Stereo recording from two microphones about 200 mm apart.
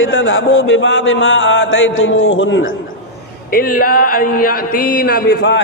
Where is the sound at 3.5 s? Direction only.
45° left (ahead or behind).